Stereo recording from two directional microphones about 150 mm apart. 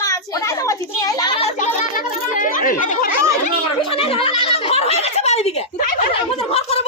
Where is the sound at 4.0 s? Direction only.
40° left (ahead or behind).